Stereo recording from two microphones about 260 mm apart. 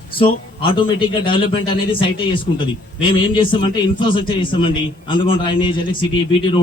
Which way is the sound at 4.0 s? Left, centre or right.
Centre.